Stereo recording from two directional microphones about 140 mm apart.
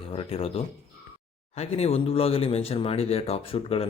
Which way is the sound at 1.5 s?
50° left (ahead or behind).